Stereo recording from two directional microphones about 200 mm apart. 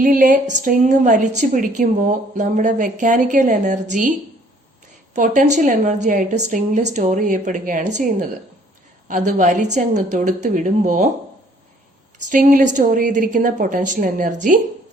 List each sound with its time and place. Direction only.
0.0 s a sound: 45° right (ahead or behind)
0.5 s a woman's voice: 40° right (ahead or behind)
5.1 s a woman's voice: 40° right (ahead or behind)
12.3 s a woman's voice: 40° right (ahead or behind)